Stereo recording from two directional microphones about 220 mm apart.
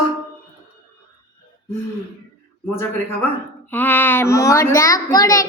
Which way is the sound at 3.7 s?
10° left (ahead or behind).